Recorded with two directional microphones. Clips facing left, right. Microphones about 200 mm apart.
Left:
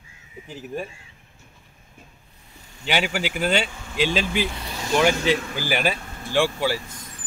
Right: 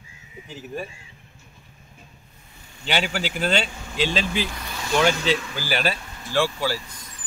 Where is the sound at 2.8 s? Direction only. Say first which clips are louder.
Left 1 dB; 10° left (ahead or behind).